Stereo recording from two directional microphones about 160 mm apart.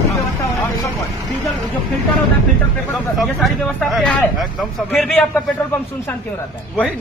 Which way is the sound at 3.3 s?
Centre (ahead or behind).